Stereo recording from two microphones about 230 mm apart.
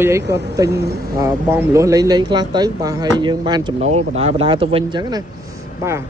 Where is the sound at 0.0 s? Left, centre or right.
Centre.